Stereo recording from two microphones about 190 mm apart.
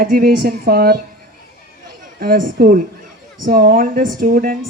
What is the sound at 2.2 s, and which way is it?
A woman's voice, 50° right (ahead or behind).